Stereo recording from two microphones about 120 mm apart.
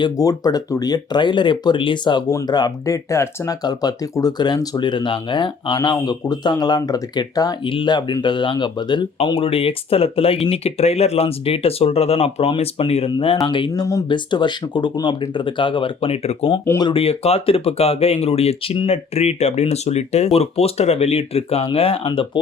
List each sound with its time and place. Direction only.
0.0 s speech: 30° left (ahead or behind); by 13.1 s 55° left (ahead or behind)
13.1 s speech: 45° left (ahead or behind)